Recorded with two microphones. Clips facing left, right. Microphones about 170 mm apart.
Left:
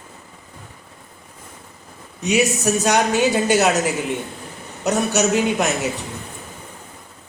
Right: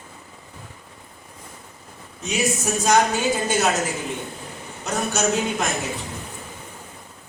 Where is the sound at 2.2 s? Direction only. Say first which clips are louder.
Left 5 dB; 70° left (ahead or behind).